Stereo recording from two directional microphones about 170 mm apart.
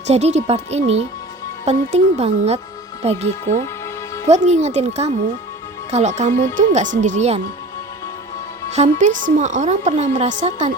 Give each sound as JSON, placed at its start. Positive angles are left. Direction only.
{"t": 0.1, "sound": "speech", "side_deg": -40}
{"t": 4.3, "sound": "speech", "side_deg": -40}
{"t": 8.7, "sound": "speech", "side_deg": -45}